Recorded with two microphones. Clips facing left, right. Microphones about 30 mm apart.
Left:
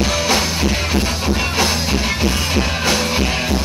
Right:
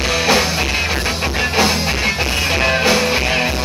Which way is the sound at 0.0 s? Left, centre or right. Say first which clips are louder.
Right 2 dB; right.